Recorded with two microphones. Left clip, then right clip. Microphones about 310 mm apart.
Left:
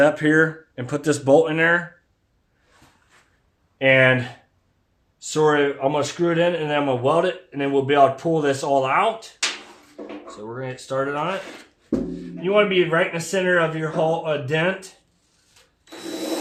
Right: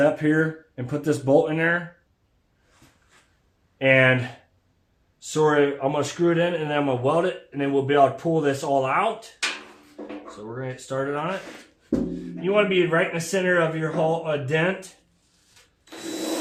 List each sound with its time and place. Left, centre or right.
0.0 s speech: left
3.8 s speech: centre
10.2 s speech: centre
15.9 s wood: centre